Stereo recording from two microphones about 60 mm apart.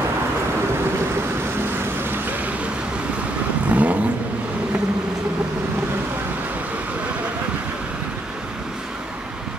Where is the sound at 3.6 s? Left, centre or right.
Right.